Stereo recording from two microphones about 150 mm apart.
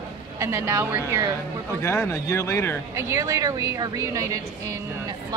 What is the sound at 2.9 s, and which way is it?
A woman's voice, 20° right (ahead or behind).